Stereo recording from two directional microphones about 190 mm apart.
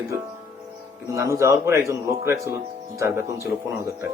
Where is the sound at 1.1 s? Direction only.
15° right (ahead or behind).